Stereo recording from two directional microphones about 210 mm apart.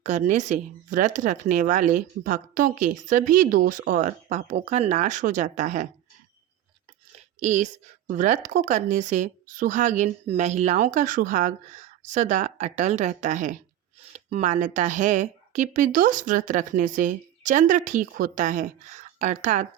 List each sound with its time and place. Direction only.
0.0 s speech: 35° right (ahead or behind)
7.3 s speech: 35° right (ahead or behind)